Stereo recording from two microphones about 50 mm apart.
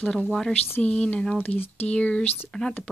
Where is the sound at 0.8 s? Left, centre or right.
Centre.